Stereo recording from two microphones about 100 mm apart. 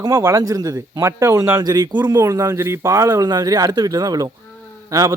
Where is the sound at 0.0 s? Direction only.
30° right (ahead or behind).